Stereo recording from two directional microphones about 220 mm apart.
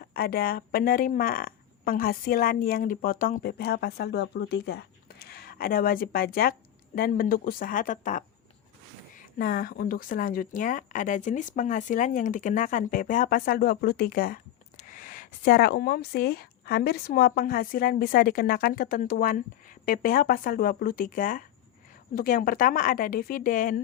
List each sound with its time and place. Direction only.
0.0 s speech: 45° left (ahead or behind)
9.4 s speech: 40° left (ahead or behind)